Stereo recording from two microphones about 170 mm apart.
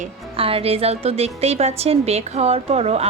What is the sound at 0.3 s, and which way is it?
A woman's voice, 35° right (ahead or behind).